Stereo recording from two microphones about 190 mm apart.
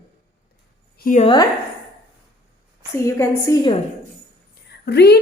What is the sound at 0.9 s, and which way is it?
Speech, 45° left (ahead or behind).